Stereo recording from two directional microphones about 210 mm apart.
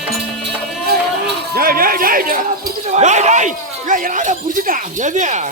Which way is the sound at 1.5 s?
45° right (ahead or behind).